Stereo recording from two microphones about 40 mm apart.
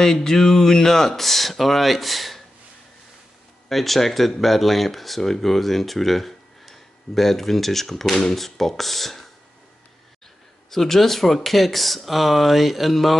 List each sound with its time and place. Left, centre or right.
0.0 s speech: centre
3.6 s speech: centre
10.7 s speech: centre